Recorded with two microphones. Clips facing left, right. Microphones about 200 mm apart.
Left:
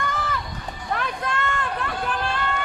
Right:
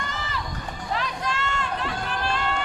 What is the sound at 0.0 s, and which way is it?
Run, 55° left (ahead or behind).